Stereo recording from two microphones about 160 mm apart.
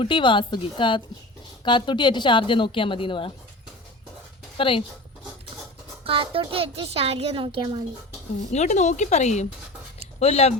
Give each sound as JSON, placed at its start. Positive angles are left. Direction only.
{"t": 0.0, "sound": "a woman's voice", "side_deg": 30}
{"t": 4.5, "sound": "speech", "side_deg": 35}
{"t": 6.1, "sound": "a child's voice", "side_deg": -35}
{"t": 8.5, "sound": "a woman's voice", "side_deg": 45}